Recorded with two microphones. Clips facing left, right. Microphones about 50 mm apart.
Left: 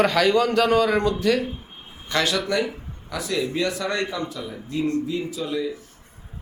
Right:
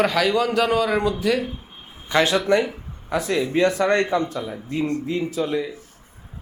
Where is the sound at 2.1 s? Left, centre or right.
Right.